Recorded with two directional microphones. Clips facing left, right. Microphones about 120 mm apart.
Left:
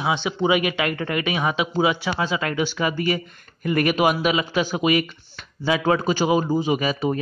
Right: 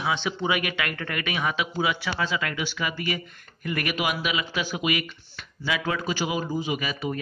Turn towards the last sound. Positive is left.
turn(degrees=35)  # may be behind; listen again after turning